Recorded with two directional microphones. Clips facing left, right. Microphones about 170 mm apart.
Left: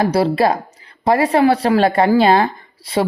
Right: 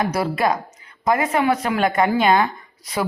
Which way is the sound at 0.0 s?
30° left (ahead or behind).